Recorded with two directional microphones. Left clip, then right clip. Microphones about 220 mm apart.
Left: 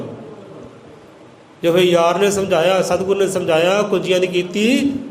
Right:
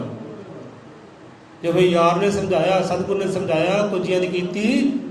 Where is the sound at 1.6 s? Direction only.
45° left (ahead or behind).